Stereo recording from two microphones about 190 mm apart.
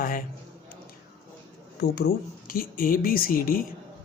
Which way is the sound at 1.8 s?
55° left (ahead or behind).